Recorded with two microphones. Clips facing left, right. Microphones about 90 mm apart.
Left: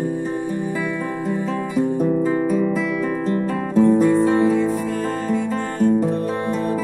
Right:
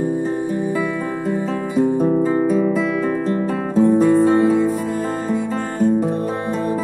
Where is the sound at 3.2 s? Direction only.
20° right (ahead or behind).